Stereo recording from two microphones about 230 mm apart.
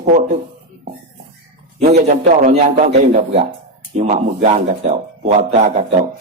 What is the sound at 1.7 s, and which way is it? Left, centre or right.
A man's voice, right.